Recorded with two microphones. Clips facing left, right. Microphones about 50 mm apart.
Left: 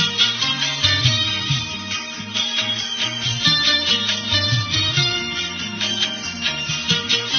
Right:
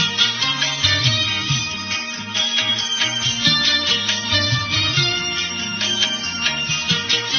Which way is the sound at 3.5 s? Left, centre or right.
Centre.